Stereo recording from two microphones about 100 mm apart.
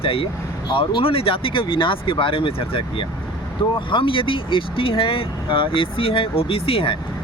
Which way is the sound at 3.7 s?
60° left (ahead or behind).